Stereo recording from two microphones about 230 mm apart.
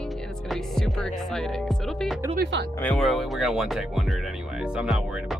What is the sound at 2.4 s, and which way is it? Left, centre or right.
Speech, right.